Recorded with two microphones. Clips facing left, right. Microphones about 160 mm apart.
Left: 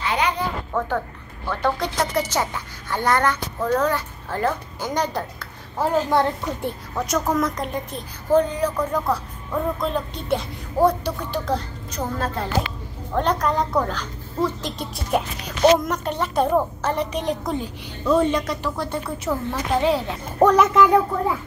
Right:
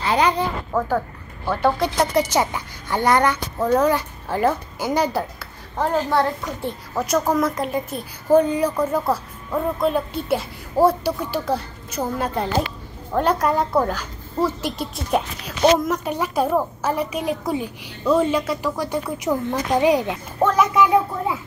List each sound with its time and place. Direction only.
0.0 s a sound: 35° right (ahead or behind)
0.7 s speech: 10° right (ahead or behind)
5.8 s a child's voice: 15° left (ahead or behind)
7.0 s speech: centre (ahead or behind)
20.4 s speech: 5° right (ahead or behind)